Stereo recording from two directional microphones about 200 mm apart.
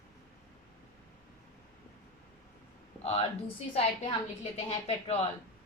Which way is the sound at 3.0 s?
30° left (ahead or behind).